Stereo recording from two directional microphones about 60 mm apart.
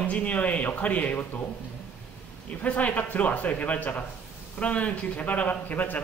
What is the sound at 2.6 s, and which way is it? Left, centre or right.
Speech, left.